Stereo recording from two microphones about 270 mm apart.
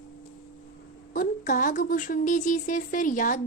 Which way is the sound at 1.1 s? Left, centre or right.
Left.